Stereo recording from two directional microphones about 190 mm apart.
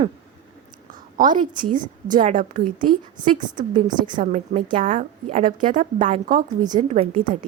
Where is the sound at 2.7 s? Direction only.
25° right (ahead or behind).